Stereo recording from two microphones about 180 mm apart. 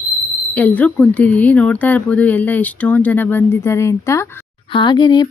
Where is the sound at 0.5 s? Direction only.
10° left (ahead or behind).